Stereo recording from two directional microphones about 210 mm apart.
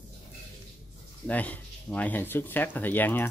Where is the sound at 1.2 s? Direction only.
5° left (ahead or behind).